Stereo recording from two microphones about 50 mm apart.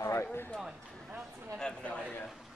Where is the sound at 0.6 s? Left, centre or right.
Centre.